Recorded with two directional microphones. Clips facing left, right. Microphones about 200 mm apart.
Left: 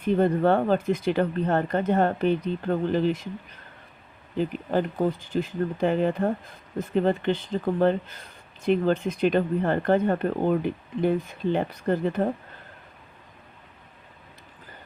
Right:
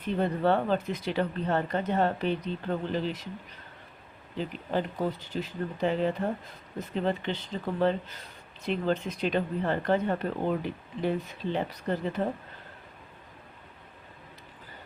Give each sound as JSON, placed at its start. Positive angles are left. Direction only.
{"t": 0.0, "sound": "speech", "side_deg": 50}
{"t": 4.4, "sound": "speech", "side_deg": 50}